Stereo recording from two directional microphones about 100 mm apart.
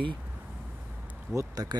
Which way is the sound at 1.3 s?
30° right (ahead or behind).